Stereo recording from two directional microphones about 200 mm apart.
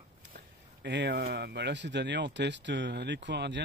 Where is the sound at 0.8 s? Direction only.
60° right (ahead or behind).